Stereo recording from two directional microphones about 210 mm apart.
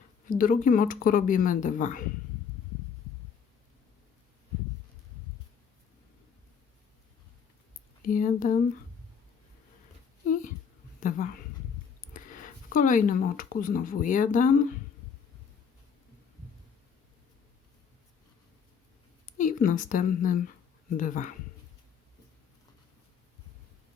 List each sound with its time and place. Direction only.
0.3 s speech: 40° left (ahead or behind)
8.0 s speech: 40° left (ahead or behind)
11.0 s speech: 40° left (ahead or behind)
19.2 s speech: 40° left (ahead or behind)